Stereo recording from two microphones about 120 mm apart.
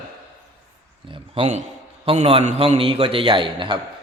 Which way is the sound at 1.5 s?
65° right (ahead or behind).